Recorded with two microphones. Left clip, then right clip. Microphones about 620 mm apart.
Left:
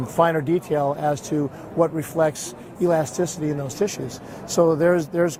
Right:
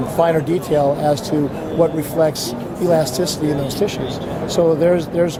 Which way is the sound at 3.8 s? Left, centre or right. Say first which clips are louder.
Right 5 dB; left.